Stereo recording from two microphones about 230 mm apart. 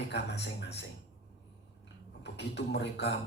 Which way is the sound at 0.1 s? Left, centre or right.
Left.